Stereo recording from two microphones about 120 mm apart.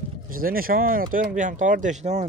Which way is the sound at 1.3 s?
90° right.